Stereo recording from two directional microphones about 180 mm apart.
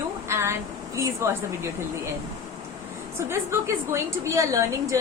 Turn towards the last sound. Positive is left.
turn(degrees=-15)  # may be behind; listen again after turning